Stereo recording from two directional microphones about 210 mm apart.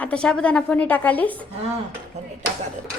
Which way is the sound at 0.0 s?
5° left (ahead or behind).